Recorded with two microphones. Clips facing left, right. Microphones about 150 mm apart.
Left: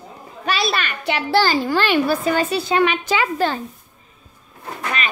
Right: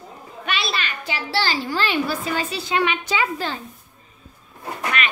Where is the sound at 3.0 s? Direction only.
65° left (ahead or behind).